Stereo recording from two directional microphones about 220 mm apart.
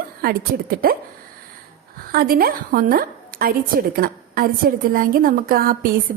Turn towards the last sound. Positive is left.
turn(degrees=-40)  # may be behind; listen again after turning